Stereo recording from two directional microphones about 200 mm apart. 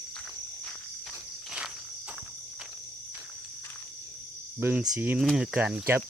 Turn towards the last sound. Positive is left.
turn(degrees=-10)  # may be behind; listen again after turning